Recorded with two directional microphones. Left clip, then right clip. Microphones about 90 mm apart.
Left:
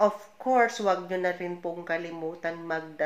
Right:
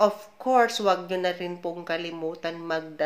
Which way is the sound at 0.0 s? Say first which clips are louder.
Right 2 dB; 20° right (ahead or behind).